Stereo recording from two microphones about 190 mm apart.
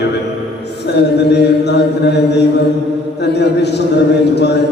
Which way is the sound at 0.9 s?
60° left (ahead or behind).